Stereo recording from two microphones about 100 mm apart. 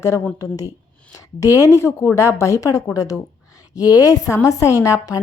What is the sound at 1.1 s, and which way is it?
Speech, 35° left (ahead or behind).